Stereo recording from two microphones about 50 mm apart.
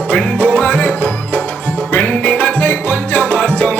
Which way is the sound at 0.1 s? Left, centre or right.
Left.